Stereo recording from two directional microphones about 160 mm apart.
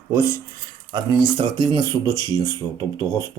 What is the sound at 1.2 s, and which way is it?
Speech, 25° right (ahead or behind).